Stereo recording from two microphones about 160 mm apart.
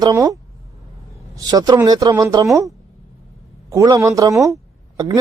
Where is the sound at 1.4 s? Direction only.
25° right (ahead or behind).